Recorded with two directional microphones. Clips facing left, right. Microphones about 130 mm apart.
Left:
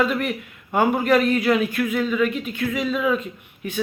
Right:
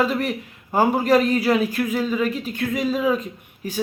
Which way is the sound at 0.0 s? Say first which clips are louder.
Even; 35° right (ahead or behind).